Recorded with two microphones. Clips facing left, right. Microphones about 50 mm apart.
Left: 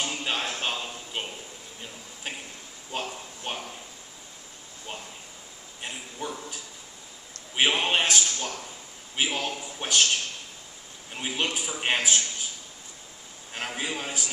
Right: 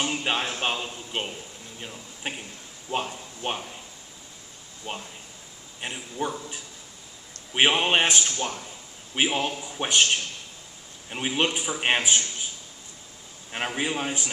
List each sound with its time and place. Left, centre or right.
0.0 s a sound: right
2.3 s a man's voice: right
3.4 s a man's voice: right
4.9 s a man's voice: right
13.5 s a man's voice: right